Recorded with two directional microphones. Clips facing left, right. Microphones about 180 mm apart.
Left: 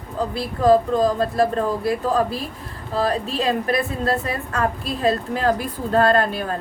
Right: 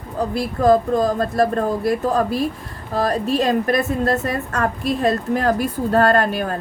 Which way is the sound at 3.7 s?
45° right (ahead or behind).